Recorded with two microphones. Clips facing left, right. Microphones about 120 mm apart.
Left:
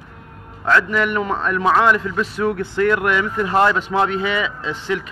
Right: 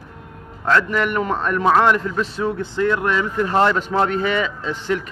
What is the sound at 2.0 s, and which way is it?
Speech, 25° right (ahead or behind).